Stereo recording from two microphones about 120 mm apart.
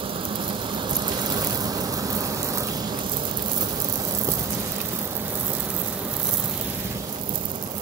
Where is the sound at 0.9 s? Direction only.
35° right (ahead or behind).